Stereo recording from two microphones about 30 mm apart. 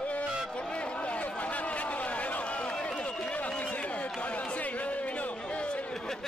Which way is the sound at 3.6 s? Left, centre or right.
Left.